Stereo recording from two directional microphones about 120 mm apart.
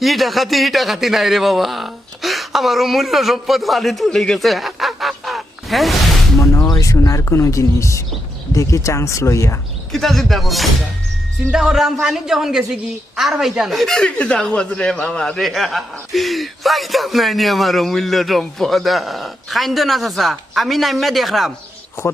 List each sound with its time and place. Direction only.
0.0 s a man's voice: centre (ahead or behind)
6.4 s speech: 25° left (ahead or behind)
9.9 s a woman's voice: centre (ahead or behind)